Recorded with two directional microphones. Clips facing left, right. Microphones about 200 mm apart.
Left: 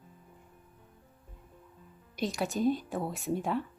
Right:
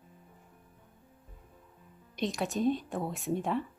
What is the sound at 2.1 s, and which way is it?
Speech, centre (ahead or behind).